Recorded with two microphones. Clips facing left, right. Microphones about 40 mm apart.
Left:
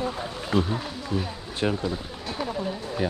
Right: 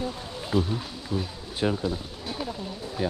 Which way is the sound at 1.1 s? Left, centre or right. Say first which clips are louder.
Left 1 dB; centre.